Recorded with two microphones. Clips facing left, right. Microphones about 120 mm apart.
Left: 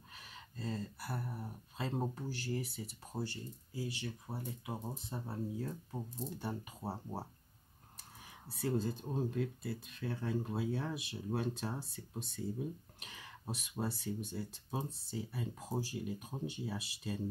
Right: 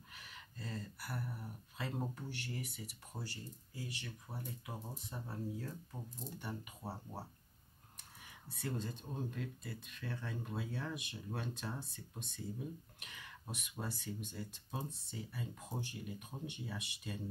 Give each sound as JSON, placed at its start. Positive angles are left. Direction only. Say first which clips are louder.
{"t": 0.1, "sound": "speech", "louder": "left 3 dB", "side_deg": 30}